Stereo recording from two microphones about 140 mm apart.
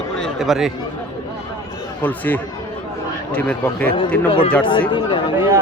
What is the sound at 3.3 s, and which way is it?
Speech, 10° left (ahead or behind).